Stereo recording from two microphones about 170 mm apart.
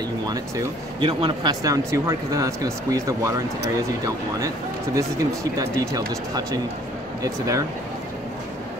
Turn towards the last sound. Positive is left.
turn(degrees=-20)  # may be behind; listen again after turning